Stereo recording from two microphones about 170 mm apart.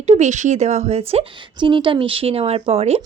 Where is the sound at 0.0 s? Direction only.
40° right (ahead or behind).